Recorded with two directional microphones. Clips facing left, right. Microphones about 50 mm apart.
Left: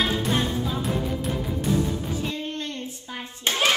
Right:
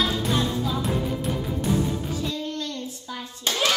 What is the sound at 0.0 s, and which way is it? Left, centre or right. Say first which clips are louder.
Music: even; left.